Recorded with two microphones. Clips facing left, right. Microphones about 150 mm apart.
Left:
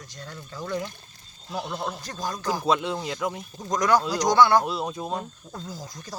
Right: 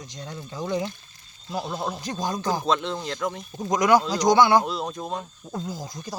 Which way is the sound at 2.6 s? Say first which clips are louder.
Left 1 dB; 10° left (ahead or behind).